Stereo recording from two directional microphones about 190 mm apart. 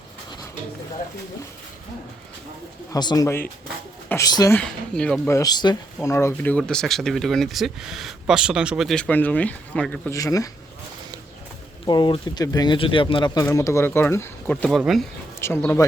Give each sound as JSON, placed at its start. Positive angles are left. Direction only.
{"t": 2.9, "sound": "speech", "side_deg": 20}
{"t": 4.5, "sound": "speech", "side_deg": 5}
{"t": 5.3, "sound": "speech", "side_deg": 20}
{"t": 10.2, "sound": "speech", "side_deg": 20}
{"t": 11.9, "sound": "speech", "side_deg": 25}
{"t": 15.4, "sound": "speech", "side_deg": 15}